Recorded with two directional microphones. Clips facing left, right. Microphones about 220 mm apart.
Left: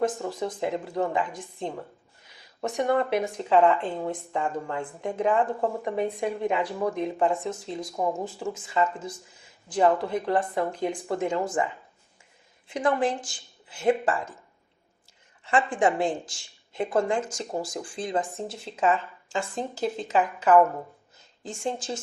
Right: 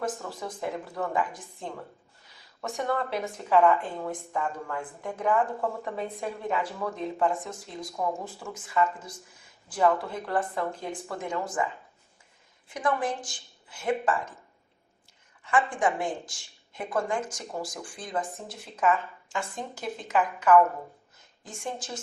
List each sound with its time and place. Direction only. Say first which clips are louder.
0.2 s speech: left 6 dB; 25° left (ahead or behind)
12.6 s speech: left 4 dB; 25° left (ahead or behind)
15.4 s speech: left 3 dB; 30° left (ahead or behind)